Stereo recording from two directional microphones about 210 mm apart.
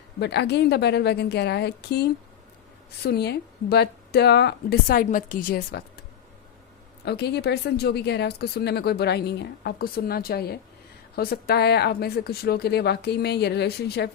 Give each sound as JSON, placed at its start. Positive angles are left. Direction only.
{"t": 0.2, "sound": "speech", "side_deg": 55}
{"t": 7.0, "sound": "speech", "side_deg": 50}